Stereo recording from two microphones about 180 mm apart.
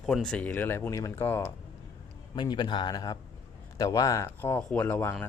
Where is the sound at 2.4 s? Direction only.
25° left (ahead or behind).